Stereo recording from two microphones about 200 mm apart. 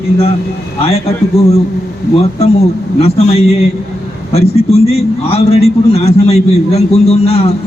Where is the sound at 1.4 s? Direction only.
30° left (ahead or behind).